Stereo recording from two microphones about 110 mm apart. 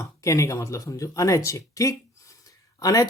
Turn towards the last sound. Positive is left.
turn(degrees=35)  # may be behind; listen again after turning